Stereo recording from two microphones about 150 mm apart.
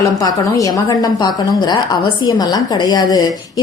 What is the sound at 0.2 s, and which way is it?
A woman's voice, 25° left (ahead or behind).